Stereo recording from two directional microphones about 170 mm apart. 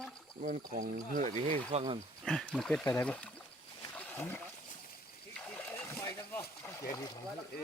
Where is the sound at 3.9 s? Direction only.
10° left (ahead or behind).